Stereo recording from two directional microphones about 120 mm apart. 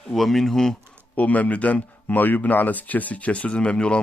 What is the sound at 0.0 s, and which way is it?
Speech, centre (ahead or behind).